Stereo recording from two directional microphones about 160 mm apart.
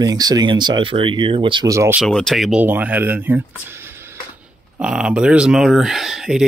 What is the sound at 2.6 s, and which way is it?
Speech, 10° right (ahead or behind).